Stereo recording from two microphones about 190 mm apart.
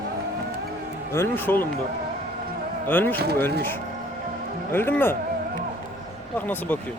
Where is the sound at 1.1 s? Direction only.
10° left (ahead or behind).